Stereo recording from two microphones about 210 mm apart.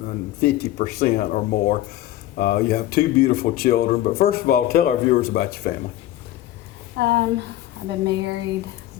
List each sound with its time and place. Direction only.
0.0 s speech: 45° left (ahead or behind)
6.9 s a woman's voice: 55° right (ahead or behind)